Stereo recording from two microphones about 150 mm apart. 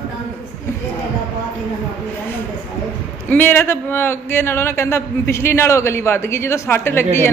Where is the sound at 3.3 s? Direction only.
15° left (ahead or behind).